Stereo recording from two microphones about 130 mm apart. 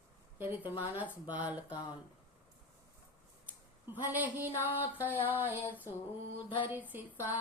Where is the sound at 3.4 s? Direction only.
15° right (ahead or behind).